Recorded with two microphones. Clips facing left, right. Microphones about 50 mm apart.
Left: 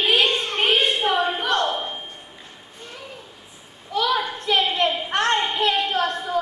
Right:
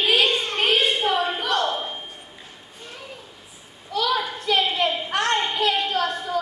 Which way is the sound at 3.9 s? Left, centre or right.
Centre.